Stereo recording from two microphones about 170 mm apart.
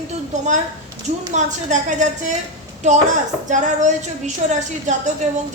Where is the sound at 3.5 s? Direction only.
45° right (ahead or behind).